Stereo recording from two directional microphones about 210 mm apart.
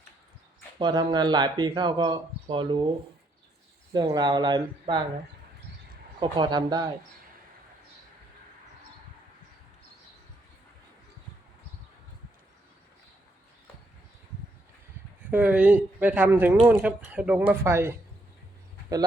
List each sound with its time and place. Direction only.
0.8 s speech: 20° right (ahead or behind)
3.9 s speech: 20° right (ahead or behind)
6.1 s speech: 20° right (ahead or behind)
15.3 s speech: 5° right (ahead or behind)